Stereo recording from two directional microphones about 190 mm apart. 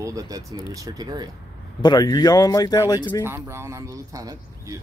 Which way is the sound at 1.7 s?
25° left (ahead or behind).